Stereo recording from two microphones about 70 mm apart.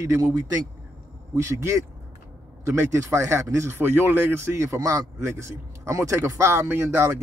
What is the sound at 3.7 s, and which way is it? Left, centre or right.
A man's voice, right.